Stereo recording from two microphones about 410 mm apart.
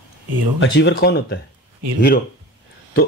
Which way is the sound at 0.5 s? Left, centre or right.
Left.